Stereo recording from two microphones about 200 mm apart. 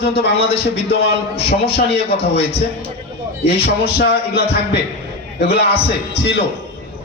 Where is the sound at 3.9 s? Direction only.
55° left (ahead or behind).